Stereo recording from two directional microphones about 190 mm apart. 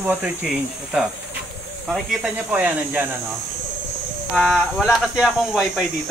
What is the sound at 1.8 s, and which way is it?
Speech, 5° right (ahead or behind).